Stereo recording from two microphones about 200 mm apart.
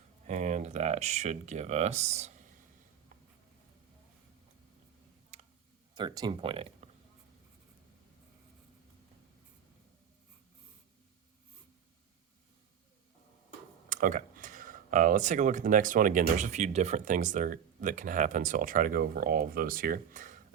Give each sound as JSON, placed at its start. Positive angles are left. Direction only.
{"t": 0.3, "sound": "speech", "side_deg": -35}
{"t": 5.9, "sound": "speech", "side_deg": -20}
{"t": 13.9, "sound": "speech", "side_deg": -40}